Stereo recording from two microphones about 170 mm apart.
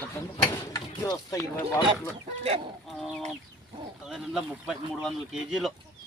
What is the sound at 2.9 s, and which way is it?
Speech, centre (ahead or behind).